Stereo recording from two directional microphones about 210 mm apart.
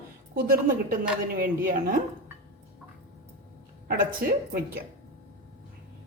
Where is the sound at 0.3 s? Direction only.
45° right (ahead or behind).